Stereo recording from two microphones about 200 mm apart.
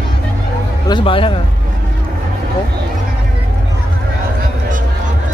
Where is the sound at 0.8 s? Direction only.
25° left (ahead or behind).